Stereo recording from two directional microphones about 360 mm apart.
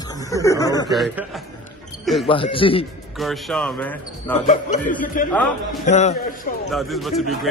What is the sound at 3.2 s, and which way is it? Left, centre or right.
Speech, centre.